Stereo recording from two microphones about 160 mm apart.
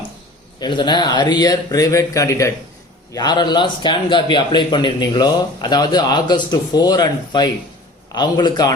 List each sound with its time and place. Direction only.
0.6 s a man's voice: 30° left (ahead or behind)